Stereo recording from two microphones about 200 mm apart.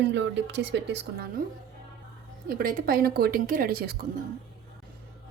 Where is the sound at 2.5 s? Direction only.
50° right (ahead or behind).